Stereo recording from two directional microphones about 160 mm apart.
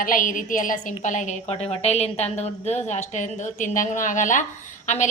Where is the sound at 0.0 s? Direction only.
55° left (ahead or behind).